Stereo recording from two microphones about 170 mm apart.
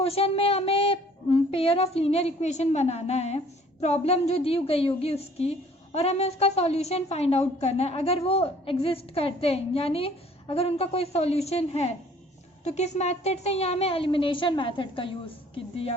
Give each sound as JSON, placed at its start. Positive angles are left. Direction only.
{"t": 0.0, "sound": "a woman's voice", "side_deg": 35}